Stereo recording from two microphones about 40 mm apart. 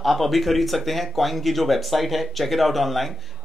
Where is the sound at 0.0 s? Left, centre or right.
Centre.